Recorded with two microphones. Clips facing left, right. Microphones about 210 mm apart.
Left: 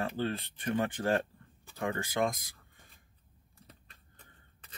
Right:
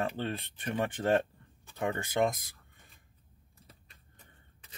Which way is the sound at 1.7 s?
20° right (ahead or behind).